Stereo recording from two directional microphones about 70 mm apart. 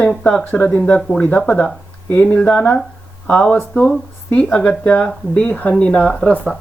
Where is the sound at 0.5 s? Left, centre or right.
Left.